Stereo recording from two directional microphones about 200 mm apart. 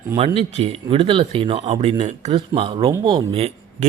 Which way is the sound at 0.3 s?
30° right (ahead or behind).